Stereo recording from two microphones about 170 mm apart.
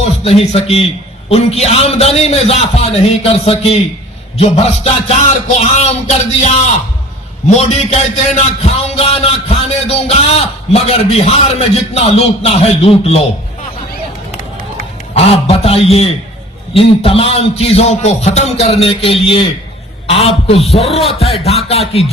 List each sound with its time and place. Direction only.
0.3 s a man's voice: 35° left (ahead or behind)
7.5 s a man's voice: 40° left (ahead or behind)
15.1 s a man's voice: 35° left (ahead or behind)